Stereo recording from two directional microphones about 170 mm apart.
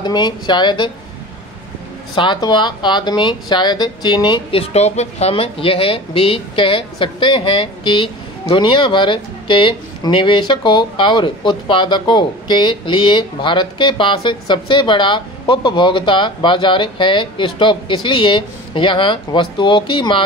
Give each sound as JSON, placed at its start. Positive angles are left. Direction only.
{"t": 0.0, "sound": "speech", "side_deg": 25}
{"t": 2.1, "sound": "speech", "side_deg": 25}